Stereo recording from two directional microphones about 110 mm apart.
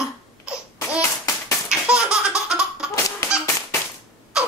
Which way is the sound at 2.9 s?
25° left (ahead or behind).